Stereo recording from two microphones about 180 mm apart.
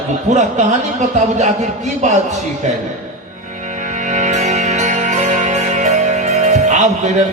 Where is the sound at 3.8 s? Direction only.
45° right (ahead or behind).